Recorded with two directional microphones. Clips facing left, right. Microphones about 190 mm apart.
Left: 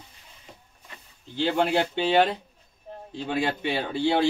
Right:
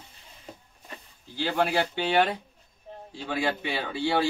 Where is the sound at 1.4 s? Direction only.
20° left (ahead or behind).